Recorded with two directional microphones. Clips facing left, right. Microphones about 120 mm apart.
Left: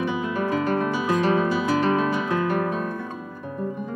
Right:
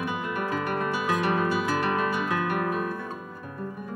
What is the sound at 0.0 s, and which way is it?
Guitar, centre (ahead or behind).